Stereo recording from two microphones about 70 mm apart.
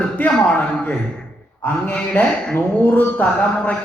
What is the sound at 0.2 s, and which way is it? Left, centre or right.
Speech, left.